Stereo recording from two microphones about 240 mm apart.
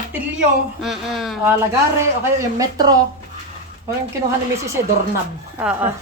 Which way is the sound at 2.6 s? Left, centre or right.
Centre.